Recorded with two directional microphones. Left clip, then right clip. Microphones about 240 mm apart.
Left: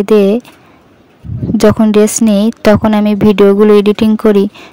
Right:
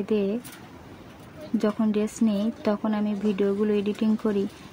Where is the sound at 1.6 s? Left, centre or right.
Left.